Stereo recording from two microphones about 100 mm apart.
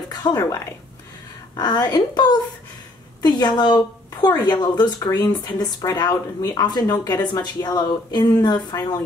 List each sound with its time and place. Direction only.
0.1 s speech: 40° left (ahead or behind)
1.6 s speech: 45° left (ahead or behind)